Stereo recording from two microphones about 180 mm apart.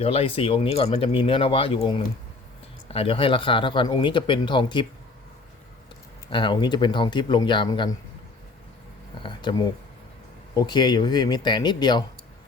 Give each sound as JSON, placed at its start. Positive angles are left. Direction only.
{"t": 0.0, "sound": "speech", "side_deg": 35}
{"t": 6.3, "sound": "speech", "side_deg": 25}
{"t": 9.2, "sound": "speech", "side_deg": 25}